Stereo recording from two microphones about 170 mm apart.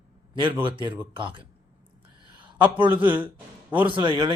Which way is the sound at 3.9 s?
30° right (ahead or behind).